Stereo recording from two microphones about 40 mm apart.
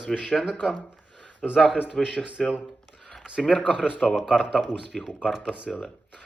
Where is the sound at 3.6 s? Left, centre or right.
Centre.